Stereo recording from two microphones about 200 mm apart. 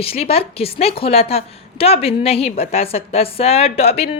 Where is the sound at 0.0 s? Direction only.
30° left (ahead or behind).